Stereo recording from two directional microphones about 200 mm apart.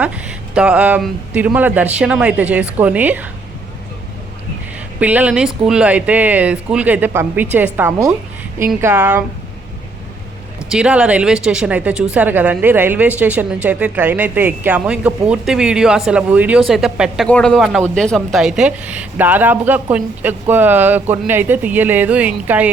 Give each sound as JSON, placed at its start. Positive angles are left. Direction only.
{"t": 0.0, "sound": "a woman's voice", "side_deg": -5}
{"t": 4.9, "sound": "a woman's voice", "side_deg": -5}
{"t": 10.7, "sound": "a woman's voice", "side_deg": -5}